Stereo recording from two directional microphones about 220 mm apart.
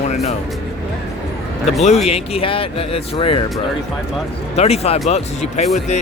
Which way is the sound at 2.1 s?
25° left (ahead or behind).